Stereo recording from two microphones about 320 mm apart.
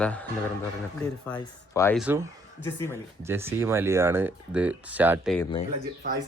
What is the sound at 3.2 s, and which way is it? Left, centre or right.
Speech, centre.